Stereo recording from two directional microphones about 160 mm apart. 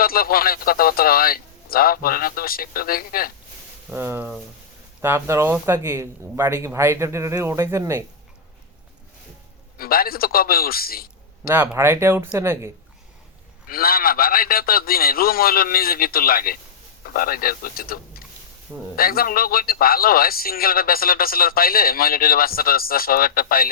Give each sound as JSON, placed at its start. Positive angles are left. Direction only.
{"t": 0.0, "sound": "a man's voice", "side_deg": 65}
{"t": 3.9, "sound": "speech", "side_deg": -15}
{"t": 9.7, "sound": "a man's voice", "side_deg": 65}
{"t": 11.4, "sound": "speech", "side_deg": -15}
{"t": 13.7, "sound": "a man's voice", "side_deg": 65}